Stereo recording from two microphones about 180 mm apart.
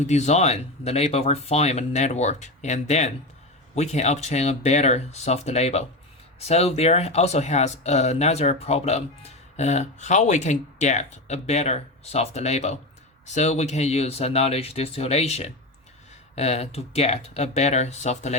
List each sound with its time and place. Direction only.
0.0 s speech: 40° left (ahead or behind)